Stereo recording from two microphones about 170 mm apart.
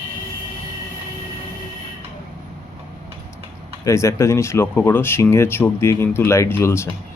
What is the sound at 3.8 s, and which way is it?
Speech, 15° left (ahead or behind).